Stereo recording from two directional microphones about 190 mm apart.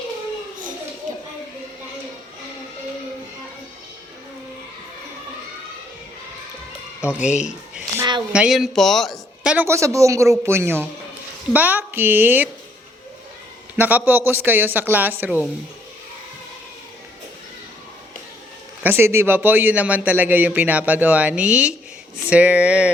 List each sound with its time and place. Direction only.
7.2 s speech: 35° left (ahead or behind)
8.3 s a man's voice: 5° right (ahead or behind)
13.7 s a man's voice: 10° right (ahead or behind)
18.8 s a man's voice: 10° right (ahead or behind)